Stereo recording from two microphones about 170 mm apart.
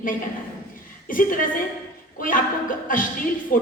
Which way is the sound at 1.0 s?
55° left (ahead or behind).